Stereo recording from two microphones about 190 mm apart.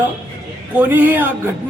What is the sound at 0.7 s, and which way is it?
Speech, 10° right (ahead or behind).